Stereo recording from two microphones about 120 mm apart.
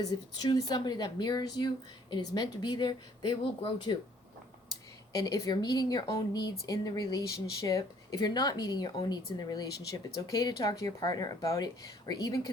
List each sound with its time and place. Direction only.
0.0 s speech: 30° left (ahead or behind)
5.1 s speech: 30° left (ahead or behind)